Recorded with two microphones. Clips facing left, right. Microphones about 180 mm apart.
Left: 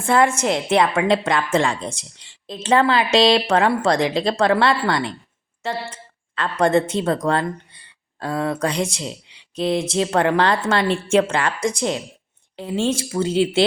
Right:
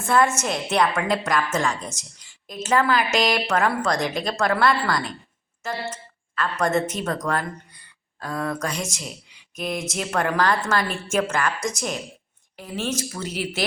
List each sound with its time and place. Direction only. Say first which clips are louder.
0.0 s a woman's voice: left 3 dB; 30° left (ahead or behind)
3.9 s speech: left 5 dB; 90° left
4.2 s a woman's voice: left 4 dB; 30° left (ahead or behind)